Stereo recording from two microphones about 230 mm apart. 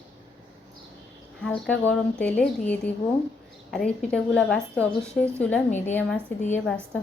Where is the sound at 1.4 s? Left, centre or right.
Centre.